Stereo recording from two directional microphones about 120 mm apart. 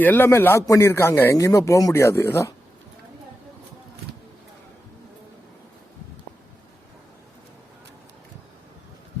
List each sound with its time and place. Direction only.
0.0 s a man's voice: 15° left (ahead or behind)